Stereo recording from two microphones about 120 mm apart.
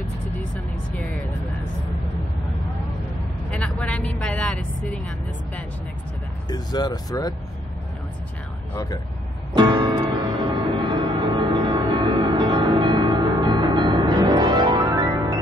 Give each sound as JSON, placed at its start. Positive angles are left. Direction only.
{"t": 3.4, "sound": "speech", "side_deg": 5}
{"t": 6.5, "sound": "speech", "side_deg": 35}
{"t": 9.6, "sound": "music", "side_deg": -35}